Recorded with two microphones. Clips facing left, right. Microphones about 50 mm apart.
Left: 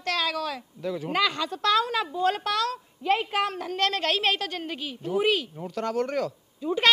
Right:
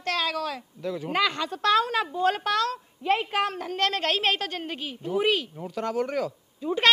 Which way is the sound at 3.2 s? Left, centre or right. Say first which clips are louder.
Even; centre.